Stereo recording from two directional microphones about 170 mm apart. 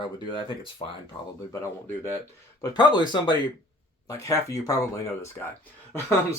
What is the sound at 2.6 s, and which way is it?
Speech, 25° left (ahead or behind).